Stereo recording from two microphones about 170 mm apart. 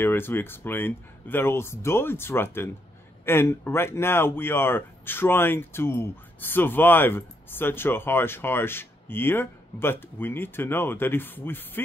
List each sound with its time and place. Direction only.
0.0 s speech: 15° left (ahead or behind)